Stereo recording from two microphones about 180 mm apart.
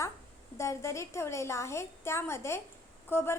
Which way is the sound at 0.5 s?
15° left (ahead or behind).